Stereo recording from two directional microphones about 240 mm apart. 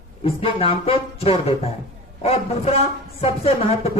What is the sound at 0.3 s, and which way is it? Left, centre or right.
A man's voice, left.